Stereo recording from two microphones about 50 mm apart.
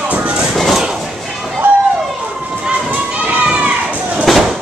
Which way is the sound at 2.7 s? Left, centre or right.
Right.